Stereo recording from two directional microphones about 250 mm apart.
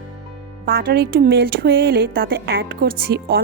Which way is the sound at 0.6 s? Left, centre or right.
Right.